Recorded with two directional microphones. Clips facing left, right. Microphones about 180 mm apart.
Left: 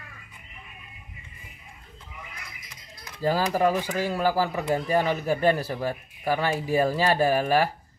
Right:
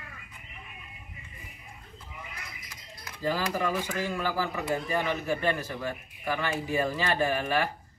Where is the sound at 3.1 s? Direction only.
40° left (ahead or behind).